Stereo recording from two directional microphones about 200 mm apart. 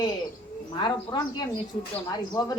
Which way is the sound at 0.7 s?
20° left (ahead or behind).